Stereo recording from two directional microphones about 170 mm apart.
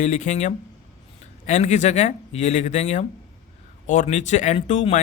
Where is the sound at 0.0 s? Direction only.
45° left (ahead or behind).